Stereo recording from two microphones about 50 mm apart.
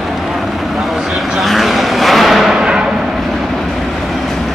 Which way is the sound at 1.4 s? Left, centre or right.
Centre.